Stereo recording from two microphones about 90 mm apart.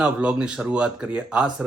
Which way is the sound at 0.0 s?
15° right (ahead or behind).